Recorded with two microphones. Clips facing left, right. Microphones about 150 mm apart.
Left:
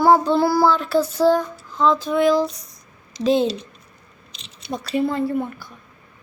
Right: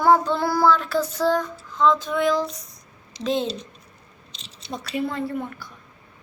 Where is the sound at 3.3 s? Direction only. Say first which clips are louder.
Left 5 dB; 5° left (ahead or behind).